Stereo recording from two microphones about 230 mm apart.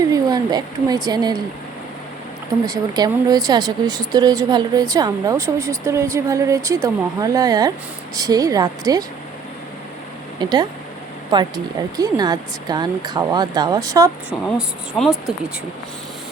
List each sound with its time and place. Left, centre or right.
0.1 s a woman's voice: centre
2.6 s speech: centre
10.4 s speech: centre
14.9 s speech: centre